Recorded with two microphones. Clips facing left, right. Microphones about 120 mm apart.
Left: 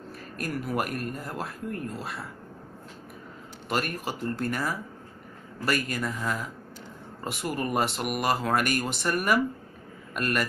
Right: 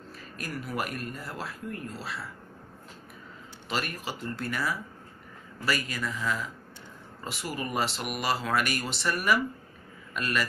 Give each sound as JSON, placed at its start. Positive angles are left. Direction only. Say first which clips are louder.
{"t": 0.4, "sound": "speech", "louder": "left 4 dB", "side_deg": 50}
{"t": 3.6, "sound": "speech", "louder": "left 4 dB", "side_deg": 50}